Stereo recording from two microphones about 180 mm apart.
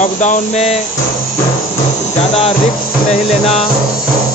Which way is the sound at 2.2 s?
35° left (ahead or behind).